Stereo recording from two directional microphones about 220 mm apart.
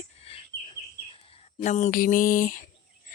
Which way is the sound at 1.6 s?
35° left (ahead or behind).